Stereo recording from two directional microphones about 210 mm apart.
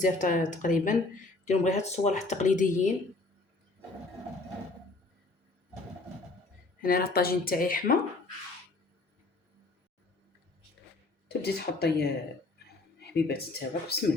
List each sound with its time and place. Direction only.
0.0 s speech: 40° left (ahead or behind)
6.8 s speech: 45° left (ahead or behind)
11.3 s speech: 50° left (ahead or behind)